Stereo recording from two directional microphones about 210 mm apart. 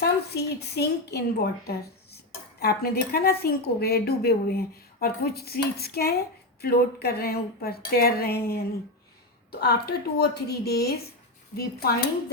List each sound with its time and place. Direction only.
0.3 s speech: 50° left (ahead or behind)